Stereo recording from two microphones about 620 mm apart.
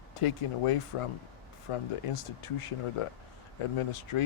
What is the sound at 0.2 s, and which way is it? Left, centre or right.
Speech, left.